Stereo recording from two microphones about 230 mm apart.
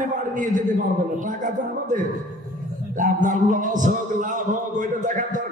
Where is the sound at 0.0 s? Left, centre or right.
Right.